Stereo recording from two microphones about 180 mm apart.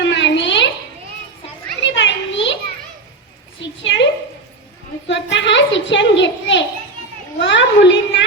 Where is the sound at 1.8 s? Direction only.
85° left.